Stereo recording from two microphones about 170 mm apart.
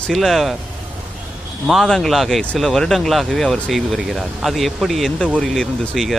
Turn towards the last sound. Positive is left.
turn(degrees=0)  # may be behind; listen again after turning